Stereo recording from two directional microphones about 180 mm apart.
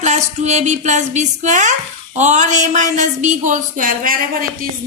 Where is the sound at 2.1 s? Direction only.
40° right (ahead or behind).